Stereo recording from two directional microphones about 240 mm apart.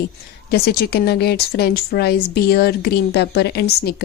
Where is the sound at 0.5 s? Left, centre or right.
Left.